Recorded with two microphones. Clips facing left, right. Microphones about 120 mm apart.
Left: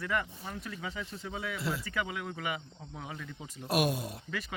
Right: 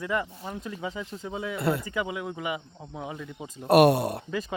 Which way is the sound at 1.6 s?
60° right (ahead or behind).